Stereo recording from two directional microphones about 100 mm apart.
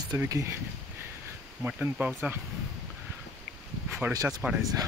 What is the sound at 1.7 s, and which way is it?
Speech, 10° right (ahead or behind).